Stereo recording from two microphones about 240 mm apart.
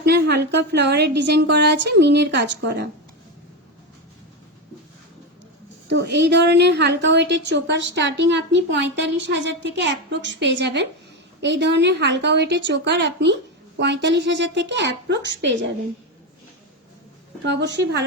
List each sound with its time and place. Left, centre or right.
0.0 s a woman's voice: right
5.9 s a woman's voice: right
17.4 s a woman's voice: right